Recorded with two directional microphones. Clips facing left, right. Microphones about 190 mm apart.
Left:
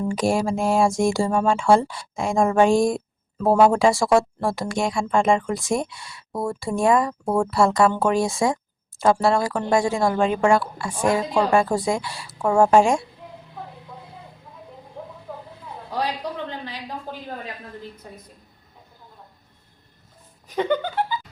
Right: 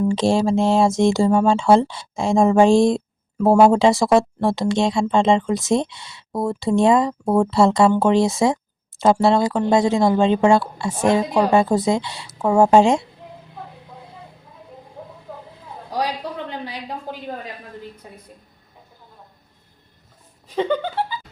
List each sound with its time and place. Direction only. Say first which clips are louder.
0.1 s speech: right 4 dB; 25° right (ahead or behind)
15.9 s a sound: right 2 dB; 15° right (ahead or behind)
20.6 s speech: right 1 dB; 25° right (ahead or behind)